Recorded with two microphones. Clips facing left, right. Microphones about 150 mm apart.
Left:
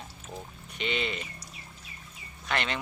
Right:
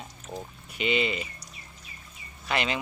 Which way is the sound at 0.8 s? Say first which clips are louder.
Right 5 dB; 5° right (ahead or behind).